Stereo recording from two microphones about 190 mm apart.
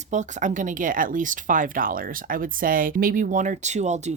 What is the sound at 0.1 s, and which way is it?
Speech, 40° right (ahead or behind).